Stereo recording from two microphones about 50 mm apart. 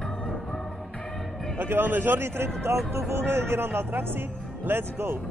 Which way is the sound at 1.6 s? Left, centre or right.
Right.